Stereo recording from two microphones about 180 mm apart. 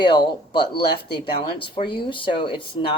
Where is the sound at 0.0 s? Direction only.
25° left (ahead or behind).